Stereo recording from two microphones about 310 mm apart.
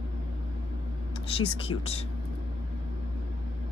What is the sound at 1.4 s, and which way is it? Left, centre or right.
Speech, centre.